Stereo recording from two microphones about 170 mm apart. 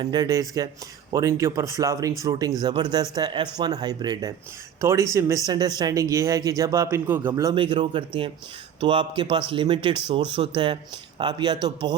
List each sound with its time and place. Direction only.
0.0 s speech: 25° right (ahead or behind)